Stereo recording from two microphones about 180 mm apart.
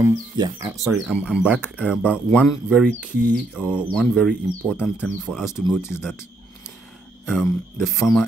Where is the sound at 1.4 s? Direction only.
5° right (ahead or behind).